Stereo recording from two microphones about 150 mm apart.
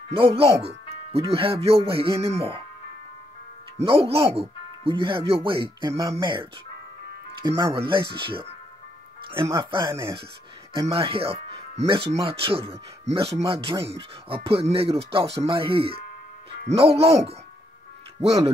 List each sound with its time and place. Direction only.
0.1 s speech: 40° right (ahead or behind)
3.7 s speech: 40° right (ahead or behind)
8.2 s speech: 35° right (ahead or behind)
9.6 s speech: 35° right (ahead or behind)
9.8 s speech: 20° right (ahead or behind)
10.7 s speech: 35° right (ahead or behind)
13.7 s speech: 20° right (ahead or behind)
14.3 s speech: 40° right (ahead or behind)